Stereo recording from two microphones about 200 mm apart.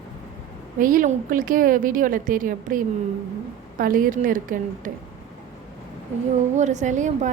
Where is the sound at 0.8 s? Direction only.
45° right (ahead or behind).